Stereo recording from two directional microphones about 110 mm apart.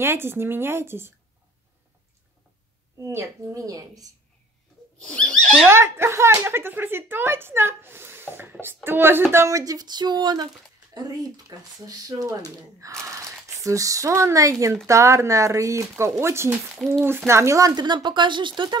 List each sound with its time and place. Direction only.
0.0 s speech: 20° right (ahead or behind)
3.0 s speech: 25° right (ahead or behind)
5.0 s speech: 10° left (ahead or behind)
5.7 s speech: 20° right (ahead or behind)
16.7 s speech: centre (ahead or behind)
17.3 s speech: 25° right (ahead or behind); by 18.8 s 45° right (ahead or behind)